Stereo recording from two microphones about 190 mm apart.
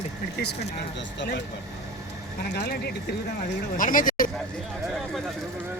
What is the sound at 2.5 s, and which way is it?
Speech, 60° left (ahead or behind).